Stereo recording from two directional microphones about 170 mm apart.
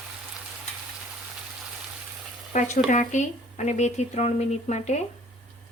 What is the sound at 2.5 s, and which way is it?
Speech, 45° left (ahead or behind).